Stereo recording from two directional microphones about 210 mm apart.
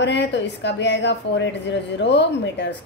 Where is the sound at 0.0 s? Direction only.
55° left (ahead or behind).